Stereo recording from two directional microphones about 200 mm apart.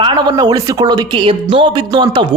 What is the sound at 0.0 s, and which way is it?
Speech, 20° right (ahead or behind).